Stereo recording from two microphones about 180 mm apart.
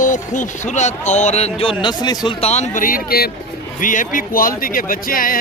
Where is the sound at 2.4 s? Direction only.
40° left (ahead or behind).